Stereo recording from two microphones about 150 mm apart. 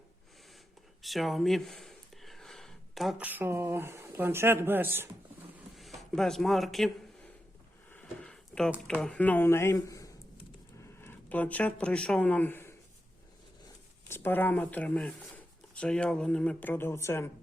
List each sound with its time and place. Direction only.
1.0 s speech: centre (ahead or behind)
5.7 s speech: centre (ahead or behind)
7.9 s a sound: 5° left (ahead or behind)
8.9 s speech: 5° left (ahead or behind)
14.1 s speech: 15° left (ahead or behind)